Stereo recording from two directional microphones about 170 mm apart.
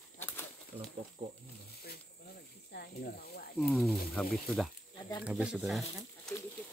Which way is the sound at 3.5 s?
Centre (ahead or behind).